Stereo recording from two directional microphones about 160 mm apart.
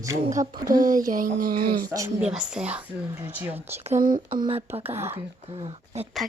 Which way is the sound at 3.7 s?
40° right (ahead or behind).